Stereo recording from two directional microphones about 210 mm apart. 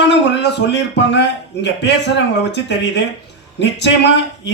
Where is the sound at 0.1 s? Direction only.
55° left (ahead or behind).